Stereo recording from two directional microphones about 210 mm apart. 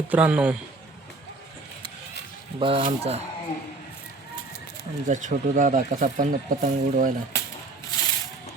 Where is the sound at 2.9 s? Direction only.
30° right (ahead or behind).